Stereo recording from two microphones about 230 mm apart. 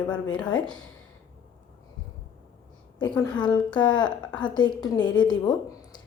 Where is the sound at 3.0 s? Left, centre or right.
Centre.